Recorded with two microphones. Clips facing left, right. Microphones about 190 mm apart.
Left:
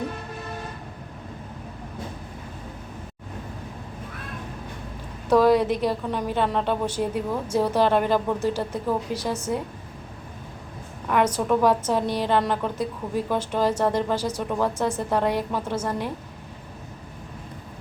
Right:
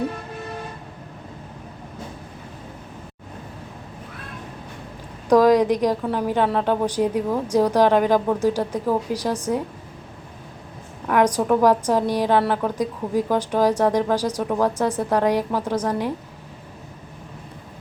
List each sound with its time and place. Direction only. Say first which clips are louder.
5.3 s a woman's voice: right 3 dB; 15° right (ahead or behind)
11.1 s a woman's voice: right 3 dB; 10° right (ahead or behind)